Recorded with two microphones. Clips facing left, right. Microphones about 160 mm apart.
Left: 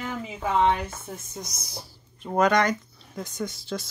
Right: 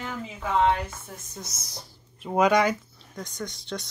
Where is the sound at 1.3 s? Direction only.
15° left (ahead or behind).